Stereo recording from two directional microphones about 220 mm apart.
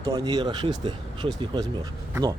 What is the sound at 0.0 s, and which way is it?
Speech, 20° right (ahead or behind).